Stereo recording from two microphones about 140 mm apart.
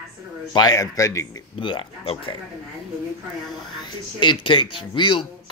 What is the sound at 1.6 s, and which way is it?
Speech, 35° left (ahead or behind).